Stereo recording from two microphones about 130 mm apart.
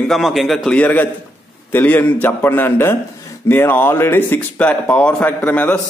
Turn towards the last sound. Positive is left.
turn(degrees=10)  # may be behind; listen again after turning